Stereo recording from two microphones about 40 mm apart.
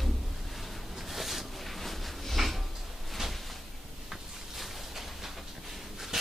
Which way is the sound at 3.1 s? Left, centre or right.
Centre.